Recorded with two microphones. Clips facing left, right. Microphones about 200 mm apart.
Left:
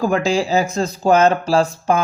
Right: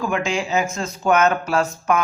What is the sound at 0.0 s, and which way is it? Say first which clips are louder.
A man's voice: left 5 dB; 35° left (ahead or behind).